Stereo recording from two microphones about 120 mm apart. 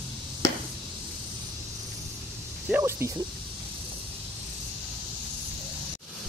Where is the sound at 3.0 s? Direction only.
20° right (ahead or behind).